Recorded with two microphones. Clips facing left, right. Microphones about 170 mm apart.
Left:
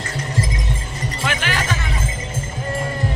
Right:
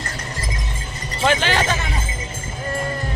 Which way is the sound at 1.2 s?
30° right (ahead or behind).